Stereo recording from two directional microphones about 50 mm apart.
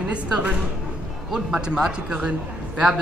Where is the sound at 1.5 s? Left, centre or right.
Centre.